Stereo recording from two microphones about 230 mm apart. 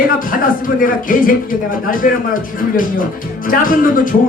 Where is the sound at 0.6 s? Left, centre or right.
Left.